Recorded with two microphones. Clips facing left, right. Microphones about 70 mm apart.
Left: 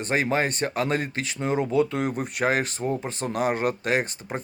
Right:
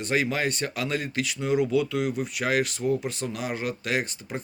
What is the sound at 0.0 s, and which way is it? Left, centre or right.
Speech, left.